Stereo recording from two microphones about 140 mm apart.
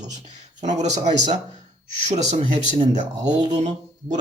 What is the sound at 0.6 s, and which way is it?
Speech, 55° right (ahead or behind).